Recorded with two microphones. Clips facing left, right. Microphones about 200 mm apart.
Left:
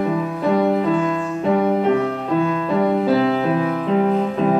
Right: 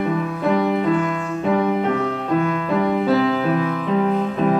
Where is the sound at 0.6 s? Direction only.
30° left (ahead or behind).